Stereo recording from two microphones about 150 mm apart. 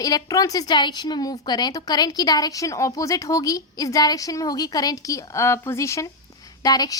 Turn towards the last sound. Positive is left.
turn(degrees=25)  # may be behind; listen again after turning